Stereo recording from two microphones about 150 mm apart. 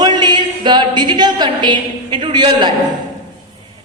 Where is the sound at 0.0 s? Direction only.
30° right (ahead or behind).